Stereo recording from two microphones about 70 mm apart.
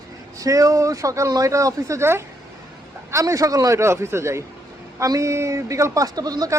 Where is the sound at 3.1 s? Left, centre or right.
Right.